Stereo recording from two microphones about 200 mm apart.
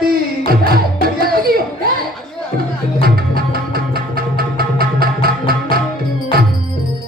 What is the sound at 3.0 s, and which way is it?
Music, 50° right (ahead or behind).